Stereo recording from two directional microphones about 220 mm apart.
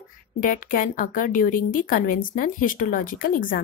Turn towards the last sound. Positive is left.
turn(degrees=40)  # may be behind; listen again after turning